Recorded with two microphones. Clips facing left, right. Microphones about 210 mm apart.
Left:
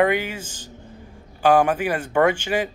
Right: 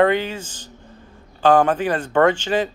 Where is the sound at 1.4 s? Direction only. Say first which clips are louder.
Right 2 dB; 10° left (ahead or behind).